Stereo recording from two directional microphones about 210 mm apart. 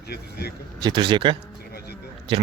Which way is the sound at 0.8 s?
20° right (ahead or behind).